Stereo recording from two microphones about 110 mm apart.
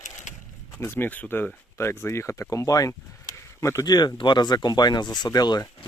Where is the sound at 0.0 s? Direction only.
90° left.